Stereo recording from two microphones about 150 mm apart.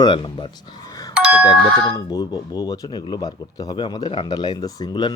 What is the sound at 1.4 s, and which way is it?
Speech, 25° left (ahead or behind).